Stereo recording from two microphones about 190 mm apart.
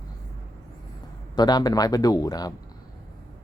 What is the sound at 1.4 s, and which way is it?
Speech, 20° left (ahead or behind).